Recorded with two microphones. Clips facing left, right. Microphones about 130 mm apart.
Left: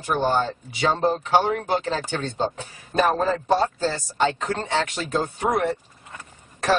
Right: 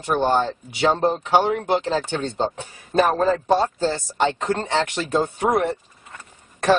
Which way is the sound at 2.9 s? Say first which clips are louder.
Right 3 dB; centre (ahead or behind).